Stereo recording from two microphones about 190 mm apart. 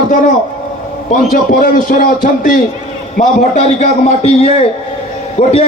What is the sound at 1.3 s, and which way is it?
A man's voice, 45° left (ahead or behind).